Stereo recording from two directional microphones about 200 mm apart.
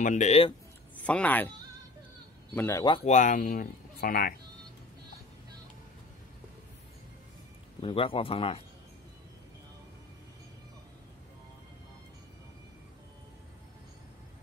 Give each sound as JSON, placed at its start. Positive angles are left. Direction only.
{"t": 0.0, "sound": "speech", "side_deg": 35}
{"t": 1.0, "sound": "speech", "side_deg": 5}
{"t": 2.5, "sound": "speech", "side_deg": 15}
{"t": 3.0, "sound": "speech", "side_deg": 40}
{"t": 7.8, "sound": "a man's voice", "side_deg": 25}